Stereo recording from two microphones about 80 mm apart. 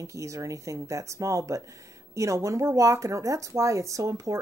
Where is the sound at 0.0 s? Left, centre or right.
Right.